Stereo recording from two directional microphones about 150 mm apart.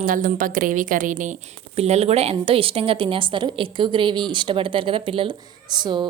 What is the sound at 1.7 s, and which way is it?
A woman's voice, 45° right (ahead or behind).